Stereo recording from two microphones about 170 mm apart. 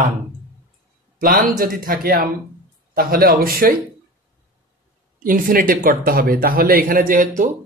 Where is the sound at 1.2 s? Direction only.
55° right (ahead or behind).